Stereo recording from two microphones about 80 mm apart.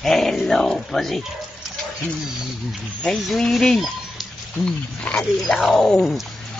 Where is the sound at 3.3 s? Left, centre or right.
Centre.